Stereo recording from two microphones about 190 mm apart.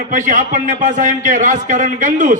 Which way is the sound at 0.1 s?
40° right (ahead or behind).